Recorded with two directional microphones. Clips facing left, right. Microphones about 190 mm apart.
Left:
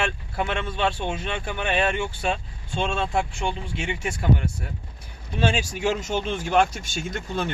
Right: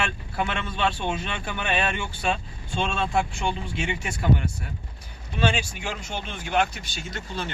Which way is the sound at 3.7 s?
50° left (ahead or behind).